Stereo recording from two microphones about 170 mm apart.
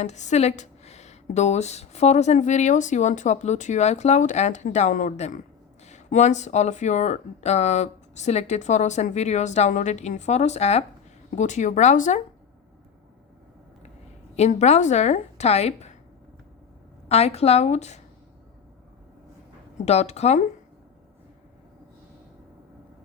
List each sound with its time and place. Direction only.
0.0 s speech: 45° left (ahead or behind)
14.3 s speech: 40° left (ahead or behind)
17.1 s speech: 40° left (ahead or behind)
19.8 s speech: 40° left (ahead or behind)